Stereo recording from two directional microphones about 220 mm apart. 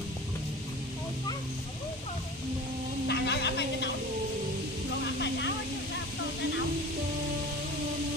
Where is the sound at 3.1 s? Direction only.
50° left (ahead or behind).